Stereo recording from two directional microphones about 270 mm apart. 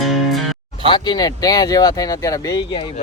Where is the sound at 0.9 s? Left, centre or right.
Centre.